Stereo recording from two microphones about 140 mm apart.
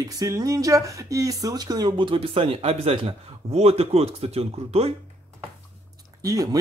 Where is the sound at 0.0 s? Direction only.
25° right (ahead or behind); by 4.9 s 45° right (ahead or behind).